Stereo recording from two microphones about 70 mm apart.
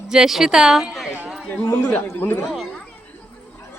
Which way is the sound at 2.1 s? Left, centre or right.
Left.